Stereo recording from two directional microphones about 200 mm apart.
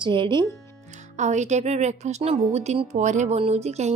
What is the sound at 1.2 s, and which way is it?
A woman's voice, 35° right (ahead or behind).